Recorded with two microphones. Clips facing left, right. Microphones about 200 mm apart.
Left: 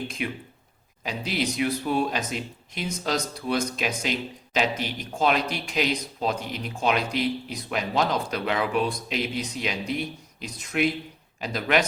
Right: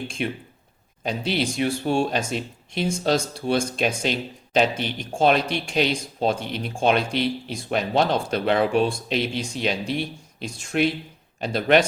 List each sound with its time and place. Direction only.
1.0 s speech: 30° right (ahead or behind)